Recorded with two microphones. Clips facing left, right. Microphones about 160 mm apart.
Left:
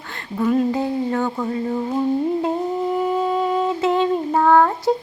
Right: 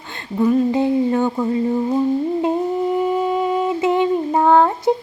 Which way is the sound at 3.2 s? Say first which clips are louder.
Right 1 dB; 15° right (ahead or behind).